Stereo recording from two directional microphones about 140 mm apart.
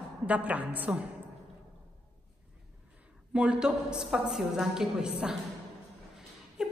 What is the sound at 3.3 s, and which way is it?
A woman's voice, 5° right (ahead or behind).